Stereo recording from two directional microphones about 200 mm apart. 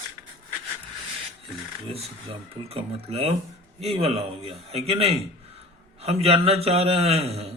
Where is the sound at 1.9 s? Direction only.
30° right (ahead or behind).